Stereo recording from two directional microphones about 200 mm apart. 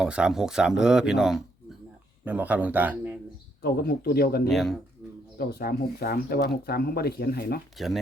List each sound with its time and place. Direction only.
0.0 s a man's voice: 5° right (ahead or behind)
3.6 s speech: 50° left (ahead or behind)
4.4 s speech: centre (ahead or behind)
5.4 s speech: 50° left (ahead or behind)
7.8 s speech: centre (ahead or behind)